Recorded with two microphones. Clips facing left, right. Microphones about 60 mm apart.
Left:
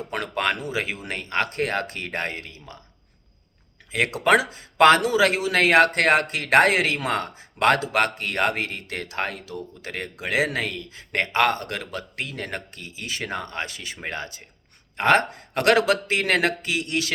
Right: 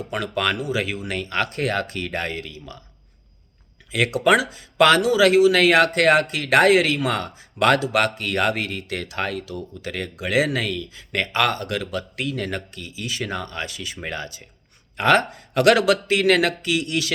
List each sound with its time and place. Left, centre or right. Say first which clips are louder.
0.1 s speech: right 1 dB; left
3.9 s speech: right 1 dB; left